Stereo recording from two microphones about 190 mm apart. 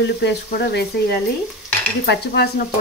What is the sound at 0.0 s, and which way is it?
Speech, 65° left (ahead or behind).